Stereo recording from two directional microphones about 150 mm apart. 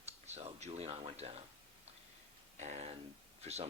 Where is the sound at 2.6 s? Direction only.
50° right (ahead or behind).